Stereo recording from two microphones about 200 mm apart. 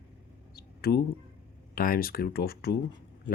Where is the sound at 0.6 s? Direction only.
50° left (ahead or behind).